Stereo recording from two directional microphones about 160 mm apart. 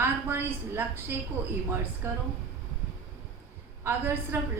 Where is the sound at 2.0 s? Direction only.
15° right (ahead or behind).